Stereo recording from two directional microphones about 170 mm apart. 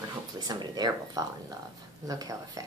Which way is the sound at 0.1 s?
25° right (ahead or behind).